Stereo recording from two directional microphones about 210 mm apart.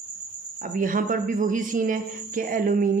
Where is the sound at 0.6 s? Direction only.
40° right (ahead or behind).